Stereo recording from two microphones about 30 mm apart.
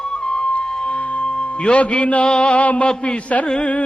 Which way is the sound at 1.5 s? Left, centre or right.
Left.